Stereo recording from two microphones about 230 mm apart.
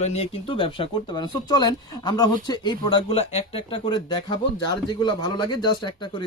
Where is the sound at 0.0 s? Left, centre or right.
Left.